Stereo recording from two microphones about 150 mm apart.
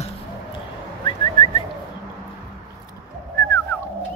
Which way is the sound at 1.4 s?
35° left (ahead or behind).